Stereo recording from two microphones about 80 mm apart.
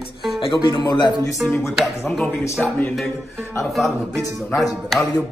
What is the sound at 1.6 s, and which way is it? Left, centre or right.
Speech, centre.